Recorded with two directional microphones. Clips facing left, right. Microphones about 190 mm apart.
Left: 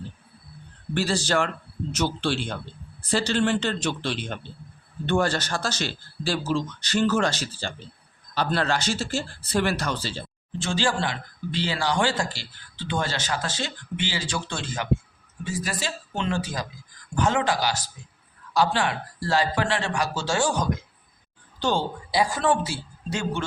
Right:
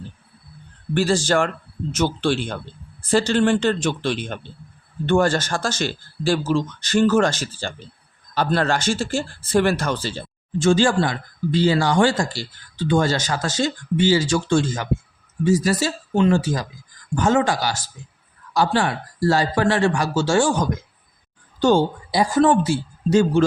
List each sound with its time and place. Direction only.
0.9 s a woman's voice: 50° right (ahead or behind)